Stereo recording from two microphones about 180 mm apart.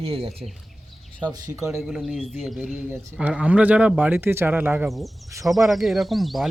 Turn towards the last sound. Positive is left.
turn(degrees=0)  # may be behind; listen again after turning